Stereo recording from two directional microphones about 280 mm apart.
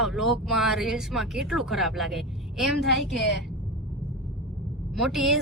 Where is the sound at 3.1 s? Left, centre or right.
Left.